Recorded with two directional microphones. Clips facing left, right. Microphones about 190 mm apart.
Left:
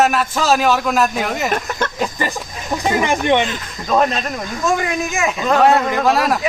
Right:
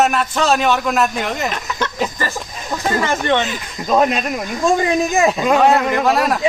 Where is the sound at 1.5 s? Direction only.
50° left (ahead or behind).